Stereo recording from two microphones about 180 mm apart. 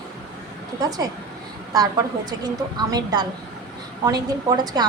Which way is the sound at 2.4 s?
20° right (ahead or behind).